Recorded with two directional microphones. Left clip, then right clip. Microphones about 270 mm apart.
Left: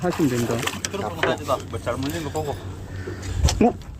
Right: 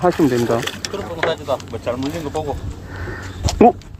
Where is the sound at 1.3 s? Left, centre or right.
Right.